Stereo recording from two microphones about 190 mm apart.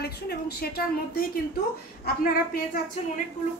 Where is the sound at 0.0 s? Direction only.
55° left (ahead or behind).